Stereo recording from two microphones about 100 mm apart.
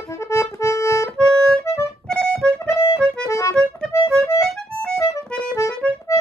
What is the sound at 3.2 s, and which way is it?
Accordion, 30° left (ahead or behind).